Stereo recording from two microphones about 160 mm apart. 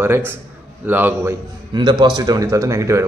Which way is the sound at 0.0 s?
15° right (ahead or behind).